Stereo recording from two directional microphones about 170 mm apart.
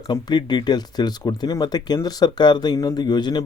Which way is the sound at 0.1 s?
25° left (ahead or behind).